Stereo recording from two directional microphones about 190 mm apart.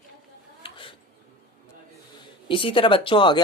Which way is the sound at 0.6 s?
25° left (ahead or behind).